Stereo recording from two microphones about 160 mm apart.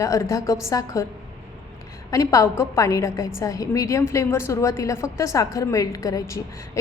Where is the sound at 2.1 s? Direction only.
20° left (ahead or behind).